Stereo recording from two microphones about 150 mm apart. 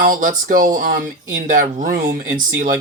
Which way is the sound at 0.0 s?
60° right (ahead or behind).